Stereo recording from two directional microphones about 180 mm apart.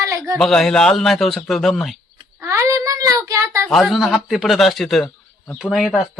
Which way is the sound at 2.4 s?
15° right (ahead or behind).